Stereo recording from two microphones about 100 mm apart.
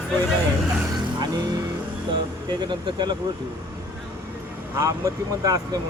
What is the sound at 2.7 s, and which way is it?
Speech, 45° right (ahead or behind).